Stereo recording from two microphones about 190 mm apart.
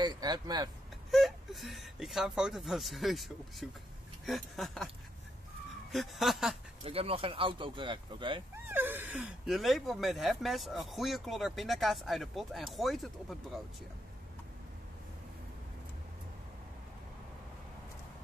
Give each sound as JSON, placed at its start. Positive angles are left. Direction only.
{"t": 0.0, "sound": "speech", "side_deg": -20}
{"t": 1.1, "sound": "speech", "side_deg": 0}
{"t": 5.9, "sound": "speech", "side_deg": 0}
{"t": 6.8, "sound": "speech", "side_deg": -30}
{"t": 8.5, "sound": "speech", "side_deg": -10}